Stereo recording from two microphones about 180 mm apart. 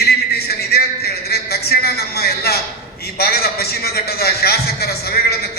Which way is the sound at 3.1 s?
60° left (ahead or behind).